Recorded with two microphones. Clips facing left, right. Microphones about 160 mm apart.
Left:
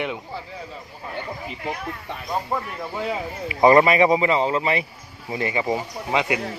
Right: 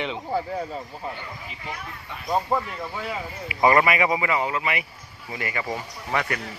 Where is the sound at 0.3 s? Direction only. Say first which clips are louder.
Right 8 dB; 50° right (ahead or behind).